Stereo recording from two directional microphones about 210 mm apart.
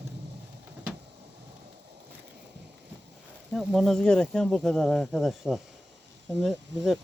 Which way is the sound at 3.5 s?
Centre (ahead or behind).